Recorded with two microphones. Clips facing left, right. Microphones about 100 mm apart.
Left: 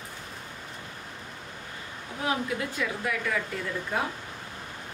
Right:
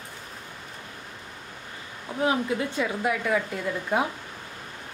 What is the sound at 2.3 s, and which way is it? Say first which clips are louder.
A woman's voice: right 3 dB; 25° right (ahead or behind).